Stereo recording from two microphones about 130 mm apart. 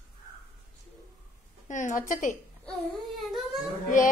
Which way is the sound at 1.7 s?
75° left (ahead or behind).